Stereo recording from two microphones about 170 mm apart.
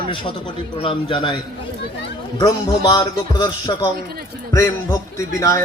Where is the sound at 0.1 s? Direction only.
30° left (ahead or behind).